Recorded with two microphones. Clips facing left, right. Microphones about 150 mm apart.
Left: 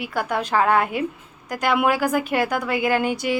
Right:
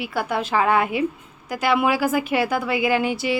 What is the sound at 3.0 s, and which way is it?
Speech, 45° left (ahead or behind).